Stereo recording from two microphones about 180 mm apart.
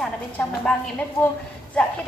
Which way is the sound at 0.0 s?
5° left (ahead or behind).